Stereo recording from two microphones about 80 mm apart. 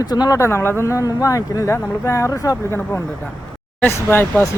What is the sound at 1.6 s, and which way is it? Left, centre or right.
Speech, left.